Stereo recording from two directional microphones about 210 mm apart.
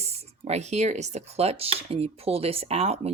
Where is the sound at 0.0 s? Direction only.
30° right (ahead or behind).